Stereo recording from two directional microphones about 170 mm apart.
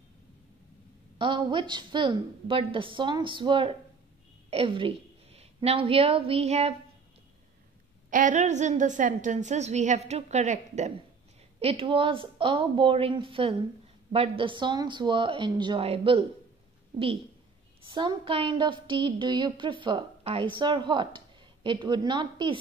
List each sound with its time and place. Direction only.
1.1 s a woman's voice: 30° right (ahead or behind)
8.1 s a woman's voice: 50° right (ahead or behind); by 16.3 s 35° right (ahead or behind)
17.8 s a woman's voice: 30° right (ahead or behind)